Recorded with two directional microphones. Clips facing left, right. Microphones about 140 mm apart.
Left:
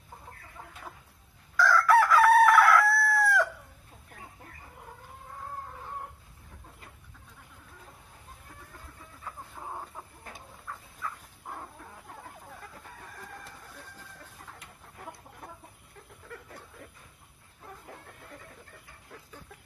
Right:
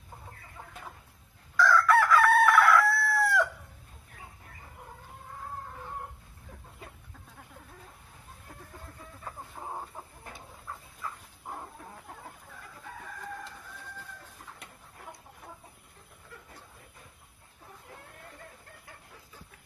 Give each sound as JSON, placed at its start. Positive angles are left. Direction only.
{"t": 1.5, "sound": "chicken", "side_deg": 0}
{"t": 9.6, "sound": "chicken", "side_deg": -20}